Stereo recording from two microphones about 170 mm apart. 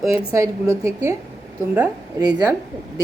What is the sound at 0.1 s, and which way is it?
Speech, 20° right (ahead or behind).